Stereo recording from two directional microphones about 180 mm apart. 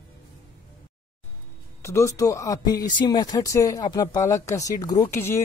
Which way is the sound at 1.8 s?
15° left (ahead or behind).